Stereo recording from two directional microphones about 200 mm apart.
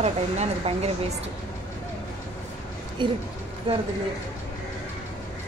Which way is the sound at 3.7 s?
25° right (ahead or behind).